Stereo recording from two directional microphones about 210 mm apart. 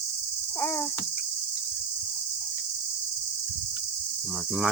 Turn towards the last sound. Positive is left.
turn(degrees=0)  # may be behind; listen again after turning